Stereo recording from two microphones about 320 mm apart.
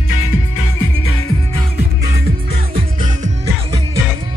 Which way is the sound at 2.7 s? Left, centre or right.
Right.